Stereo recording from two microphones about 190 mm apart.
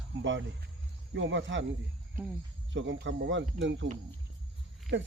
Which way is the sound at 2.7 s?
75° right (ahead or behind).